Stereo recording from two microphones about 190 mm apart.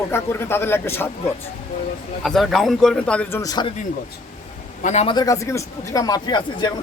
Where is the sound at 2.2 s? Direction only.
Centre (ahead or behind); by 3.7 s 20° left (ahead or behind).